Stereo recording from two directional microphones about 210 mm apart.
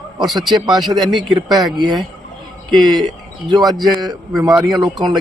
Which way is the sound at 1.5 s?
Centre (ahead or behind).